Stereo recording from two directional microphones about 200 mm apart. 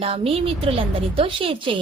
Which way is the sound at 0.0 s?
30° right (ahead or behind).